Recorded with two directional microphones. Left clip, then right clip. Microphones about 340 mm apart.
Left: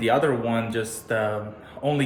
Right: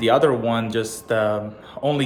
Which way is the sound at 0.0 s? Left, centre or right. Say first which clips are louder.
Right 4 dB; centre.